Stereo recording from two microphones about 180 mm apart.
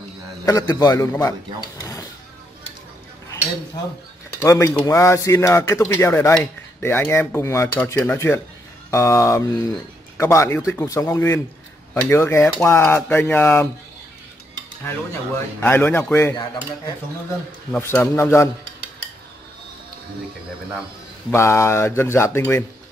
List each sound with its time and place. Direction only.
0.5 s a man's voice: 20° left (ahead or behind)
1.8 s vehicle: 20° left (ahead or behind)
4.4 s speech: 15° left (ahead or behind)
15.6 s speech: 10° left (ahead or behind)
17.7 s speech: 15° left (ahead or behind)
21.3 s speech: 15° left (ahead or behind)